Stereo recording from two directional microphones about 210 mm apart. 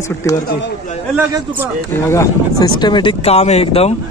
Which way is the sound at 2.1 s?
15° left (ahead or behind).